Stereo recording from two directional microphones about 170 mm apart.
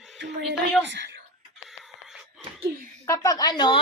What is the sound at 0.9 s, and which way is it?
Speech, 90° right.